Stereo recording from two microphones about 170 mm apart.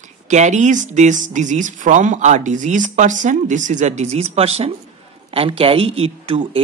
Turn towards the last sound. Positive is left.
turn(degrees=-30)  # may be behind; listen again after turning